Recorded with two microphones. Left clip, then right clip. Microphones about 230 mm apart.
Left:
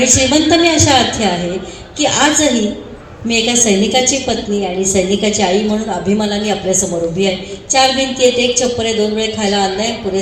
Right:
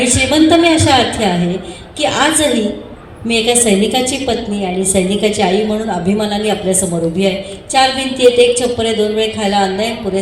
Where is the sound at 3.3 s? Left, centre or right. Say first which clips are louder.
Right 1 dB; right.